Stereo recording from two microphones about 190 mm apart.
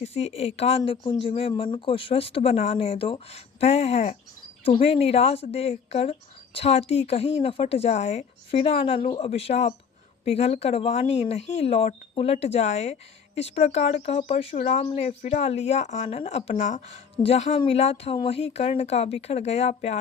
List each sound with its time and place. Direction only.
0.0 s speech: 35° left (ahead or behind)
0.8 s speech: 20° left (ahead or behind)